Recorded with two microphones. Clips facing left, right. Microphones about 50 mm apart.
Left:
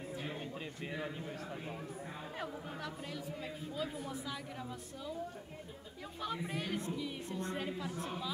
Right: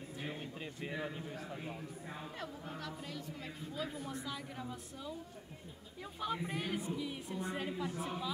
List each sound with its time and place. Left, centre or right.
0.8 s a woman's voice: centre
2.3 s speech: centre
3.7 s a woman's voice: centre
6.2 s a woman's voice: centre